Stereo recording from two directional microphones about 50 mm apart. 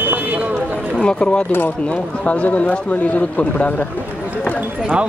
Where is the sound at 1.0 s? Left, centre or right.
Centre.